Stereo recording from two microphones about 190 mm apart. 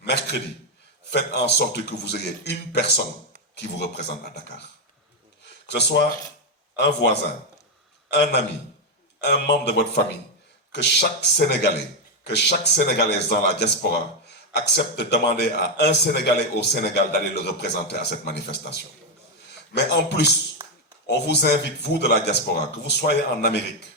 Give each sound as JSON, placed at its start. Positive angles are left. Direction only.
{"t": 0.0, "sound": "a man's voice", "side_deg": 60}
{"t": 5.6, "sound": "a man's voice", "side_deg": 60}